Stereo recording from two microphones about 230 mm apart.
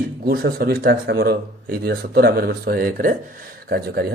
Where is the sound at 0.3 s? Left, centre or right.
Right.